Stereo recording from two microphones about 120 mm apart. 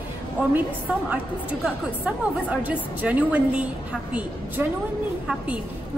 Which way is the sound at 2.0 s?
10° right (ahead or behind).